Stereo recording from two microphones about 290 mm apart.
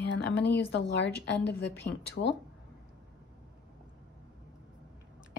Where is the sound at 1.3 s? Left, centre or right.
Centre.